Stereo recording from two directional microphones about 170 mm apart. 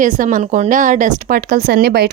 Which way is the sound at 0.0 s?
50° right (ahead or behind).